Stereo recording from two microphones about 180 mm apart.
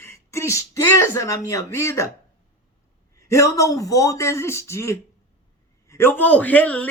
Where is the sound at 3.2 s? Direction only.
15° left (ahead or behind).